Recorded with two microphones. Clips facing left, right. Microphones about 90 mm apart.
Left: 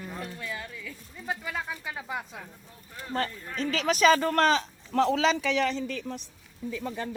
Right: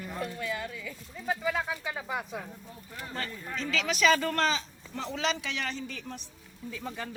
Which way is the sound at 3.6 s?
45° left (ahead or behind).